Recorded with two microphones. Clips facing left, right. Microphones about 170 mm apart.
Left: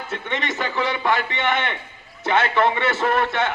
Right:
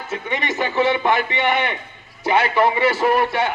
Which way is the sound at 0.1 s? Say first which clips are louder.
Right 3 dB; 15° right (ahead or behind).